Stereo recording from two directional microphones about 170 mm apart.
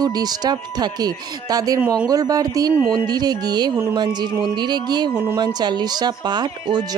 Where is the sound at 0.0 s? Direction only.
25° right (ahead or behind).